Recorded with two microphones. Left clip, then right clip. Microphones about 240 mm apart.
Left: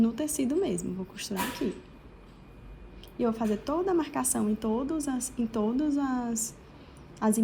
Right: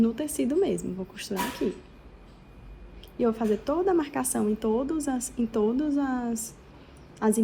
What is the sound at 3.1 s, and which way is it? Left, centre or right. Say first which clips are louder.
A woman's voice: right 4 dB; centre.